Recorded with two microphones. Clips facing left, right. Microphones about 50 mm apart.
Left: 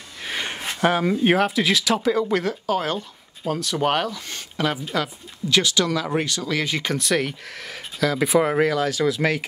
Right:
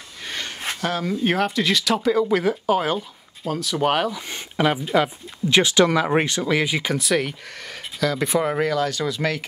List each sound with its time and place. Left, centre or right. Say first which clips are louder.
0.7 s speech: left 5 dB; left
1.4 s speech: left 1 dB; centre
4.1 s speech: right 2 dB; centre